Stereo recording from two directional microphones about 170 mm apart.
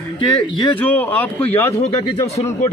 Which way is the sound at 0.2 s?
30° left (ahead or behind).